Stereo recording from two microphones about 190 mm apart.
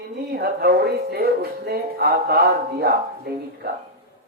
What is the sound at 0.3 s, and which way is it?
Speech, 55° right (ahead or behind).